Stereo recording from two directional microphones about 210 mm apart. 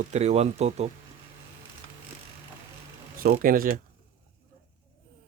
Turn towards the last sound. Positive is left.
turn(degrees=-40)  # may be behind; listen again after turning